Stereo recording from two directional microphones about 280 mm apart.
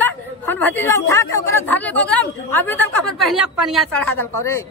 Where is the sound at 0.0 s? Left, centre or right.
Centre.